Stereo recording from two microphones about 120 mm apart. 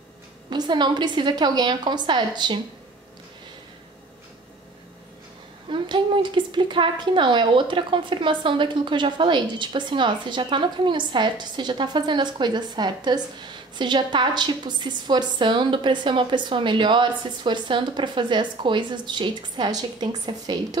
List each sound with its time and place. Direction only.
0.5 s a woman's voice: 40° right (ahead or behind)
5.7 s a woman's voice: 40° right (ahead or behind)